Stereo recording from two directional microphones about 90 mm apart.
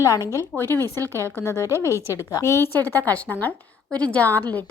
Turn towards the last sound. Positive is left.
turn(degrees=20)  # may be behind; listen again after turning